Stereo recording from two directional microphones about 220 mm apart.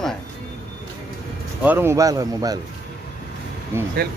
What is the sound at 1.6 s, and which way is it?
Speech, 10° right (ahead or behind).